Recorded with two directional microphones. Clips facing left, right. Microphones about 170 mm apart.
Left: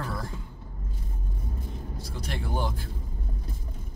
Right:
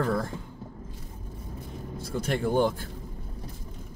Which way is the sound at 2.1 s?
50° right (ahead or behind).